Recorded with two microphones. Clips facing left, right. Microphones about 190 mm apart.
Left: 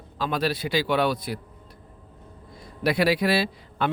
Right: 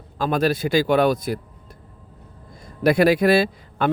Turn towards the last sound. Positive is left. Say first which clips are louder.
# right 5 dB
turn(degrees=-50)  # may be behind; listen again after turning